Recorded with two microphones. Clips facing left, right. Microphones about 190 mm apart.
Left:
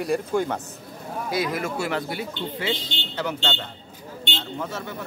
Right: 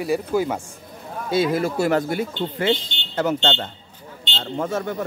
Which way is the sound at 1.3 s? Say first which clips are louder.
Right 7 dB; 30° right (ahead or behind).